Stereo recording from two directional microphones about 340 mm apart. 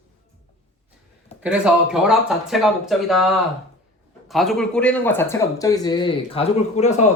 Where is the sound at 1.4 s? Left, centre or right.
Centre.